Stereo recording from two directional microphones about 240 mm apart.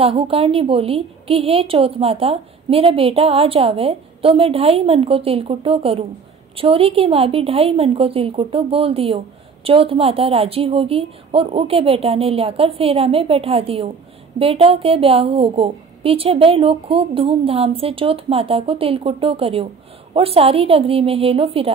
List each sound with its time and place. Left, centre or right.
0.0 s a woman's voice: right